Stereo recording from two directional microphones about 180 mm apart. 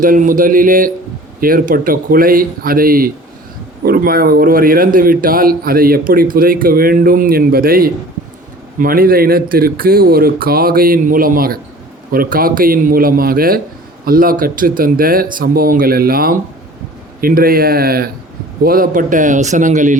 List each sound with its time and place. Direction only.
0.0 s a man's voice: 50° right (ahead or behind)